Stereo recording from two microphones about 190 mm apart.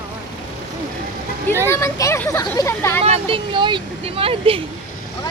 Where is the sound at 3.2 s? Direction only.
25° right (ahead or behind).